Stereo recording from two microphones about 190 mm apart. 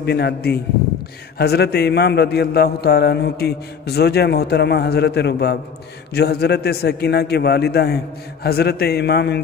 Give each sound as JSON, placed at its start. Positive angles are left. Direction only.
{"t": 0.0, "sound": "a man's voice", "side_deg": 60}